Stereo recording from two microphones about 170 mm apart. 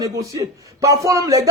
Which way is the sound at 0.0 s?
20° right (ahead or behind).